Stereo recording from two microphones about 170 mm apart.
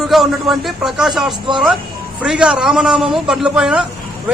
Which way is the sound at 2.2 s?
5° right (ahead or behind).